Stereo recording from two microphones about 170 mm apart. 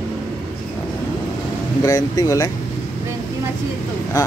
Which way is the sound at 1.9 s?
20° left (ahead or behind).